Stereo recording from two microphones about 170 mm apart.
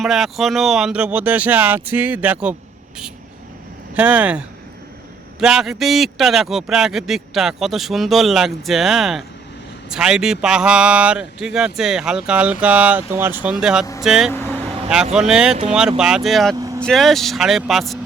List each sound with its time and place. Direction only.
0.0 s speech: centre (ahead or behind)
3.9 s a man's voice: 10° right (ahead or behind)
16.6 s vehicle: 20° right (ahead or behind)
16.8 s a man's voice: centre (ahead or behind)